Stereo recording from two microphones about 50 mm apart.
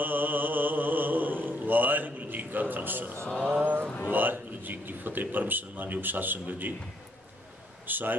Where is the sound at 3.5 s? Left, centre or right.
Right.